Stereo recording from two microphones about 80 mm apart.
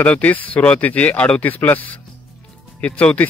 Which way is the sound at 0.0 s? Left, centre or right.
Centre.